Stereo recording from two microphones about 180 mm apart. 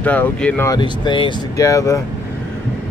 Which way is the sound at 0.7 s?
25° left (ahead or behind).